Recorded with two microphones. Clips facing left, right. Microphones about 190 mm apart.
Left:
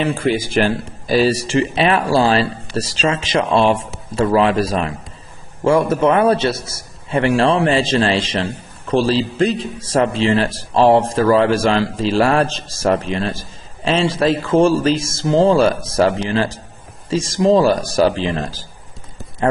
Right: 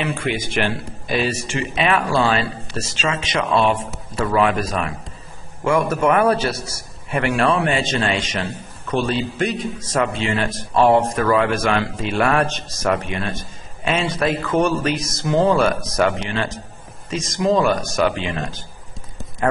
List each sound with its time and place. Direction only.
0.0 s a man's voice: 30° left (ahead or behind)